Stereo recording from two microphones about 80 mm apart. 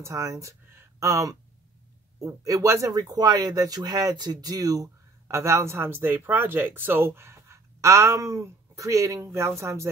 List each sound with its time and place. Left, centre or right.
0.0 s speech: right
5.3 s speech: right